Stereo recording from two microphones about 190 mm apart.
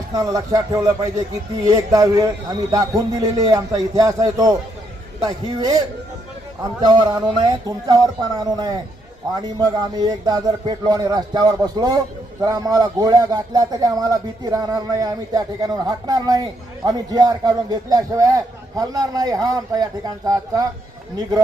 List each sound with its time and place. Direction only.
0.1 s a man's voice: 20° right (ahead or behind)